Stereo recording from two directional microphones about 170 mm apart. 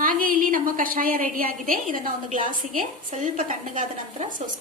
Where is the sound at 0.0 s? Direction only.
55° right (ahead or behind).